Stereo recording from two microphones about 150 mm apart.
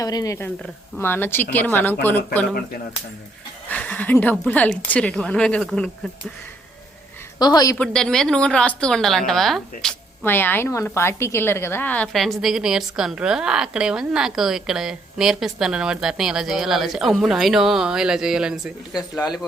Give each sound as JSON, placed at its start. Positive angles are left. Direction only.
{"t": 0.0, "sound": "a woman's voice", "side_deg": 25}
{"t": 3.7, "sound": "a woman's voice", "side_deg": 10}
{"t": 7.3, "sound": "speech", "side_deg": 25}
{"t": 7.8, "sound": "a woman's voice", "side_deg": 5}
{"t": 10.2, "sound": "a woman's voice", "side_deg": 15}